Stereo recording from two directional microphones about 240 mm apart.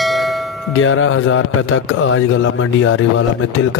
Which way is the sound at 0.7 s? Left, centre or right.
Left.